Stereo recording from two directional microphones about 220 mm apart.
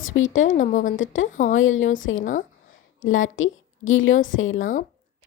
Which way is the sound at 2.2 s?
35° left (ahead or behind).